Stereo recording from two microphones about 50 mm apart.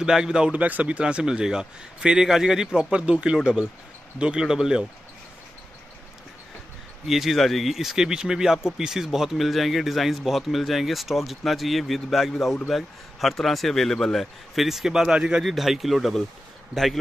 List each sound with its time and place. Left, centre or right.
0.0 s a man's voice: centre
0.5 s a man's voice: right; by 4.8 s centre
7.1 s a man's voice: centre
15.4 s speech: centre